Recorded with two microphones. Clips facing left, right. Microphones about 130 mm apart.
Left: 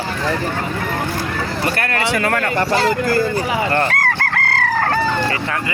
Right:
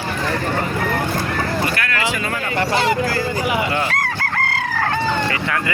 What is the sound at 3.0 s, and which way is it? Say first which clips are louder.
Speech: left 4 dB; 50° left (ahead or behind).